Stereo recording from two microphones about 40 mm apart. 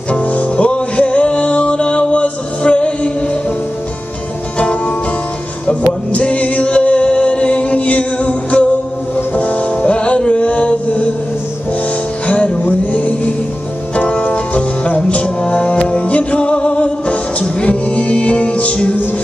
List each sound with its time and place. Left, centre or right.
0.1 s music: left
4.6 s music: left
12.3 s music: left